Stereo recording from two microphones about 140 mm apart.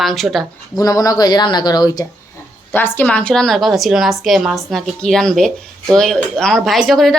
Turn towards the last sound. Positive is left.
turn(degrees=0)  # may be behind; listen again after turning